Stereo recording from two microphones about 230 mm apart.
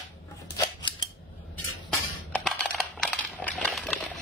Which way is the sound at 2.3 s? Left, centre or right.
Centre.